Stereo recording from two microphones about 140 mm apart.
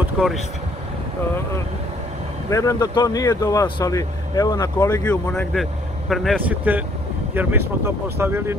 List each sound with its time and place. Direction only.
2.5 s speech: 25° left (ahead or behind)
4.8 s speech: 15° left (ahead or behind)
5.3 s speech: 5° left (ahead or behind)
6.7 s speech: 15° right (ahead or behind)